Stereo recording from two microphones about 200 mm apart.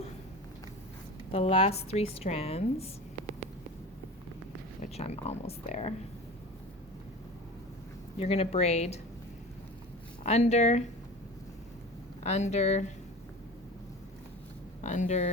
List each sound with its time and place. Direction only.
1.3 s speech: 30° left (ahead or behind)
4.8 s speech: 30° left (ahead or behind)
8.2 s speech: 30° left (ahead or behind)
10.2 s speech: 35° left (ahead or behind)
12.2 s speech: 35° left (ahead or behind)
14.8 s speech: 35° left (ahead or behind)